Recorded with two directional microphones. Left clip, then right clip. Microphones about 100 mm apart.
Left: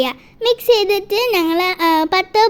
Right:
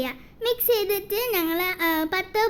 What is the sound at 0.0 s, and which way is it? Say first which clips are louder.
A child's voice: left 10 dB; 35° left (ahead or behind).